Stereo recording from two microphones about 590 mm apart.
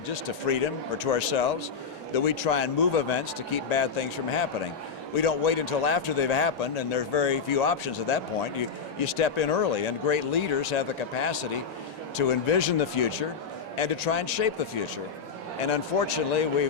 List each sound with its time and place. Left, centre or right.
0.1 s a man's voice: left
15.7 s a man's voice: left